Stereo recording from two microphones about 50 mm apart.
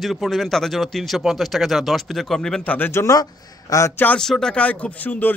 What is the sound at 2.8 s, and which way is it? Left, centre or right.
Speech, left.